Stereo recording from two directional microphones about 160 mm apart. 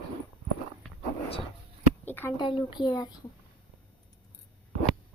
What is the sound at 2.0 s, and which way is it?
Speech, 10° left (ahead or behind).